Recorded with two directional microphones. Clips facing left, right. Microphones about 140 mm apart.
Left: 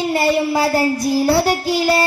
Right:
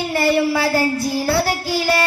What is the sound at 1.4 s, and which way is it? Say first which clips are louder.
Child singing: left 3 dB; 25° left (ahead or behind).